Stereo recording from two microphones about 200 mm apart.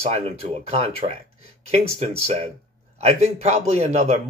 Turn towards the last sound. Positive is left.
turn(degrees=-35)  # may be behind; listen again after turning